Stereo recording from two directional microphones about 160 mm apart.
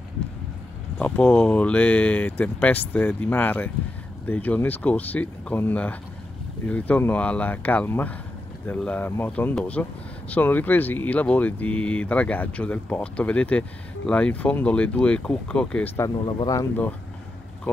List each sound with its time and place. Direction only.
0.9 s speech: 10° left (ahead or behind)
16.3 s speech: 25° left (ahead or behind)